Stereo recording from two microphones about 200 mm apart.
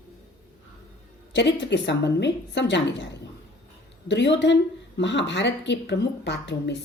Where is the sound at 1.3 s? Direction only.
60° left (ahead or behind).